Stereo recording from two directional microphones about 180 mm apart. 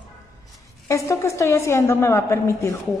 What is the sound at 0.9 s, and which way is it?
A woman's voice, 15° left (ahead or behind).